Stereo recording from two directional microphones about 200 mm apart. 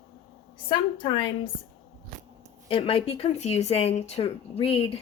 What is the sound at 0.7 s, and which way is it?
Speech, 25° left (ahead or behind).